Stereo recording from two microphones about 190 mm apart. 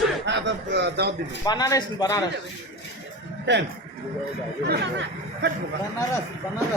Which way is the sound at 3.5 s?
65° right (ahead or behind).